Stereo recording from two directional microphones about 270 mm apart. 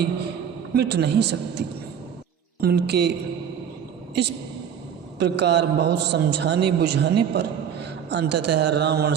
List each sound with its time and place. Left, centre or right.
0.7 s a man's voice: right
5.2 s a man's voice: right